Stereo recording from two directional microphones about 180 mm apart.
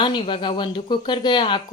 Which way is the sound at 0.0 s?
25° left (ahead or behind).